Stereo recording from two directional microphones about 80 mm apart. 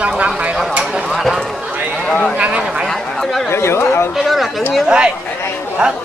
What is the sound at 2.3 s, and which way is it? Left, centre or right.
Speech, centre.